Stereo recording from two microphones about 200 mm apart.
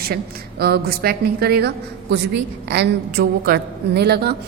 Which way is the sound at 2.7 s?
55° right (ahead or behind).